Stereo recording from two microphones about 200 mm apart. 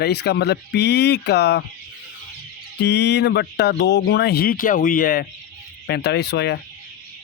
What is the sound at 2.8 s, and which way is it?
Speech, 55° left (ahead or behind).